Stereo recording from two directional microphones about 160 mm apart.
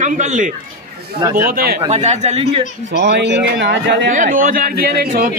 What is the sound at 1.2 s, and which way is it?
Speech, 15° right (ahead or behind).